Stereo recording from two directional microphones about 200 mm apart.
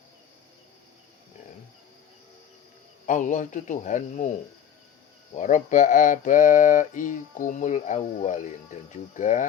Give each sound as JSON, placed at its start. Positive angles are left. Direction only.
{"t": 3.1, "sound": "mantra", "side_deg": 40}